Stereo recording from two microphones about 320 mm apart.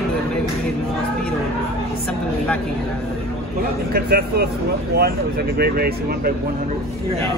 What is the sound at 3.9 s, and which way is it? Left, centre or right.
Speech, right.